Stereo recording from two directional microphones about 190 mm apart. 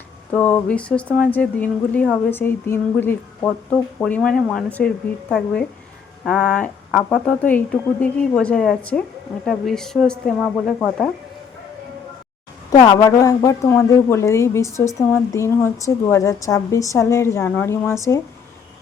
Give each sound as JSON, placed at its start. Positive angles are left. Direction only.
{"t": 0.3, "sound": "a woman's voice", "side_deg": 10}
{"t": 6.2, "sound": "a woman's voice", "side_deg": 5}
{"t": 12.8, "sound": "a woman's voice", "side_deg": 20}